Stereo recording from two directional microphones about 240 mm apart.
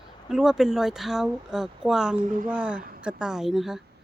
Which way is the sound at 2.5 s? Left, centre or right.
Centre.